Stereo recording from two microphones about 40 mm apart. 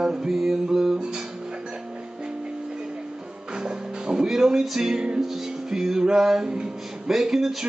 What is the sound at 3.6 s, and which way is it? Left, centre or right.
Music, centre.